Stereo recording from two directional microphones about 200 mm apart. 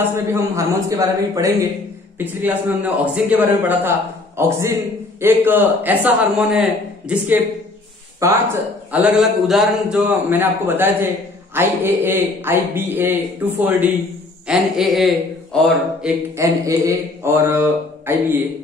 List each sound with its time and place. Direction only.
0.0 s a man's voice: 10° right (ahead or behind)
8.9 s a man's voice: 5° right (ahead or behind)
16.3 s a man's voice: 15° right (ahead or behind)